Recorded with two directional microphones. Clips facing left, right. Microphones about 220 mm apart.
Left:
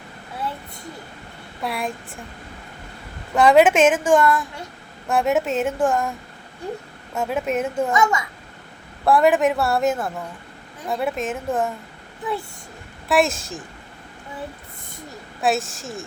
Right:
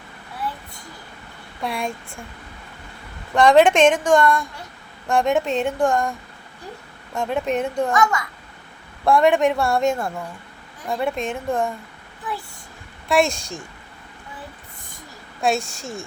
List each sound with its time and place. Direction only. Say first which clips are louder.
1.6 s speech: even; centre (ahead or behind)
3.3 s speech: even; 5° left (ahead or behind)
9.0 s speech: even; 5° left (ahead or behind)
13.1 s speech: even; centre (ahead or behind)
15.4 s speech: even; centre (ahead or behind)